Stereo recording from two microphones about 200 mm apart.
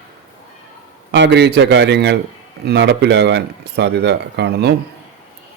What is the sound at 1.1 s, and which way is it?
Speech, 60° right (ahead or behind).